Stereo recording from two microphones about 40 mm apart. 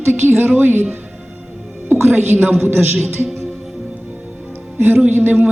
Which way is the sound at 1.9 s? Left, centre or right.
Right.